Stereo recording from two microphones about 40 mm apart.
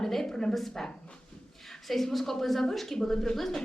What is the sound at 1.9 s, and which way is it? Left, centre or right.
A woman's voice, centre.